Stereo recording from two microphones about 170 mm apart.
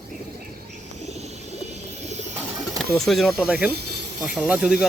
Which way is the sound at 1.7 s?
40° right (ahead or behind).